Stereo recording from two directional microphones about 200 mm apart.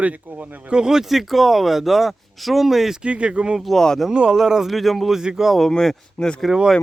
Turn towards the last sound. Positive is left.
turn(degrees=0)  # may be behind; listen again after turning